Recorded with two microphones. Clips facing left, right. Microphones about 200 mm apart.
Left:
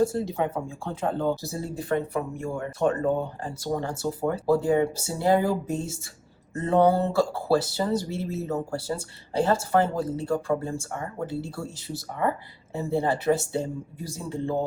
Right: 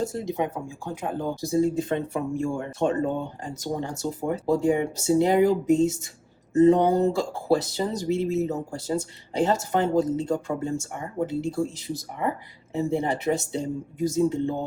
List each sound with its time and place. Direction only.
0.0 s speech: 20° right (ahead or behind)